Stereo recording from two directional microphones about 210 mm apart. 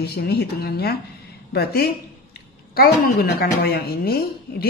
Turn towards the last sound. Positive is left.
turn(degrees=45)  # may be behind; listen again after turning